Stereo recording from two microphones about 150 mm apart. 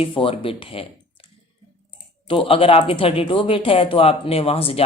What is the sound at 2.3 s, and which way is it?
Speech, 35° left (ahead or behind).